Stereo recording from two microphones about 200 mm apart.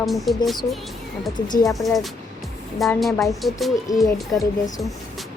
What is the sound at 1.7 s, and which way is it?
Speech, centre (ahead or behind).